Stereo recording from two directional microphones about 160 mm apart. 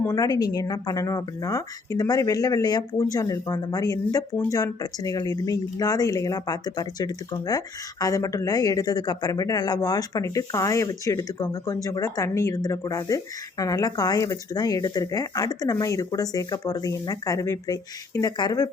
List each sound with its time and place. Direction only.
0.0 s speech: 20° left (ahead or behind)